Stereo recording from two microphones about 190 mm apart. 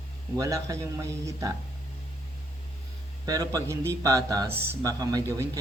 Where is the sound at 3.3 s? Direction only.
20° right (ahead or behind).